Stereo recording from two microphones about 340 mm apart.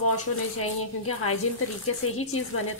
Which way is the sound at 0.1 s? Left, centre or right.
Left.